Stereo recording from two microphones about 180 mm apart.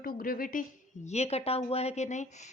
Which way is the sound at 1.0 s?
40° left (ahead or behind).